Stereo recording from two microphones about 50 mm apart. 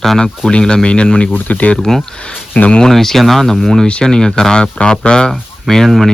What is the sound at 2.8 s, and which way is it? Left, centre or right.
Speech, centre.